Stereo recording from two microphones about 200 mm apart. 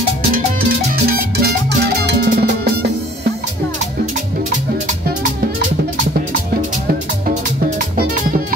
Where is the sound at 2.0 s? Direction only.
50° right (ahead or behind).